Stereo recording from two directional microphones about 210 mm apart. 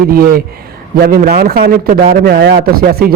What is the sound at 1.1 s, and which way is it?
A man's voice, 50° right (ahead or behind).